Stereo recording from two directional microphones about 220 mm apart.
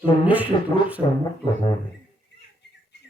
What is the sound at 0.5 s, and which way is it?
Speech, 20° left (ahead or behind).